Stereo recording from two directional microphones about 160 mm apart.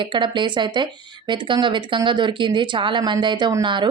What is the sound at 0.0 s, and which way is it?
Speech, 30° right (ahead or behind).